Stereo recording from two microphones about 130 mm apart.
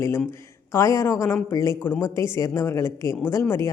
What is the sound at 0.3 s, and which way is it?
A woman's voice, 20° left (ahead or behind).